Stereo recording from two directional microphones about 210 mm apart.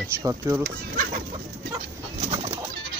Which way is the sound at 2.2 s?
30° right (ahead or behind).